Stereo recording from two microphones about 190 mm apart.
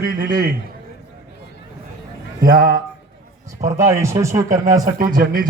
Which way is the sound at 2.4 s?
50° right (ahead or behind).